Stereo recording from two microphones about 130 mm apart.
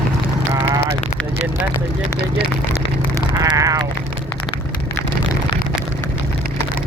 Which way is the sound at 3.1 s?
25° right (ahead or behind).